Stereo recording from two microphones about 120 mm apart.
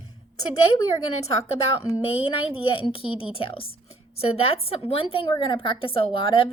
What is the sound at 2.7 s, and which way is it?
A woman's voice, 50° left (ahead or behind).